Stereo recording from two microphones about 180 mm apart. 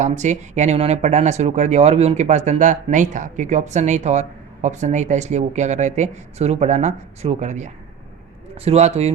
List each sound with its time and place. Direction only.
0.0 s speech: 40° right (ahead or behind)